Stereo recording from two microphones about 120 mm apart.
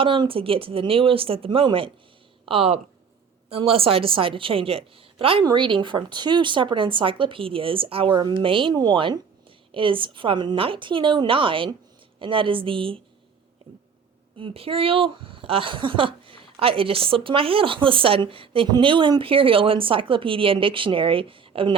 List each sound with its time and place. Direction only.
0.0 s speech: 45° right (ahead or behind)
14.3 s speech: 50° right (ahead or behind)